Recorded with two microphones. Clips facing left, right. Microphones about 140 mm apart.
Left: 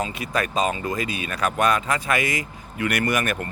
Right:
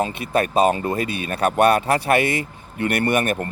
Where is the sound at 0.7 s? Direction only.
35° right (ahead or behind).